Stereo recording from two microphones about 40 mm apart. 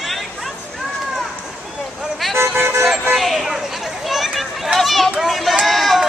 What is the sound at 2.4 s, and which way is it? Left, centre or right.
Vehicle, right.